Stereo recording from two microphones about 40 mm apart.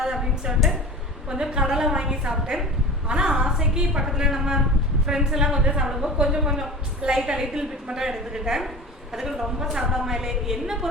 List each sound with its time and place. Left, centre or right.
0.0 s a sound: centre
1.3 s a woman's voice: right
5.8 s a woman's voice: centre